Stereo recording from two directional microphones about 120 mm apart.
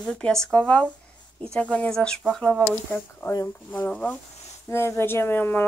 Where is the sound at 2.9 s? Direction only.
20° left (ahead or behind).